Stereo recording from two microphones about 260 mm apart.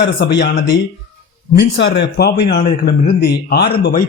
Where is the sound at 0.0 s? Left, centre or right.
Left.